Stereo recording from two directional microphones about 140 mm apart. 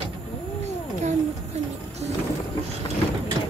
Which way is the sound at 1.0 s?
50° right (ahead or behind).